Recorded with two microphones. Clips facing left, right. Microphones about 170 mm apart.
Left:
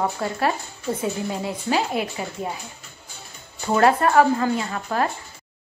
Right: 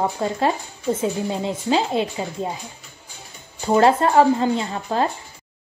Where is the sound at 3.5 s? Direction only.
15° right (ahead or behind).